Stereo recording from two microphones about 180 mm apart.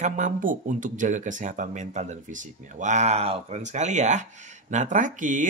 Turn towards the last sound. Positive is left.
turn(degrees=-45)  # may be behind; listen again after turning